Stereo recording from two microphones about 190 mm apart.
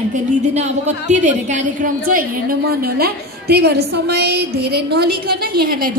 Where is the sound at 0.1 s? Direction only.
40° right (ahead or behind).